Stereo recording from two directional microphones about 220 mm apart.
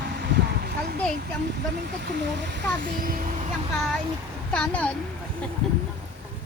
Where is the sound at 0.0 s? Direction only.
50° right (ahead or behind).